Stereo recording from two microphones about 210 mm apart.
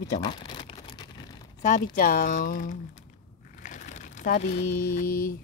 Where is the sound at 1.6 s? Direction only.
35° left (ahead or behind).